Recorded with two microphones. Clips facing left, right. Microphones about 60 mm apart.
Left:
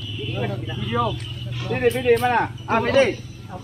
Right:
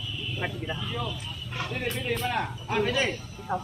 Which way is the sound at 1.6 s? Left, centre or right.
Left.